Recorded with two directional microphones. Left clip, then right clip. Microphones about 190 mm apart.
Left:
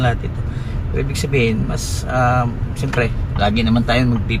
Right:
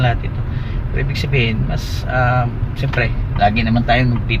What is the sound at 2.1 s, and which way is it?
Speech, 10° left (ahead or behind).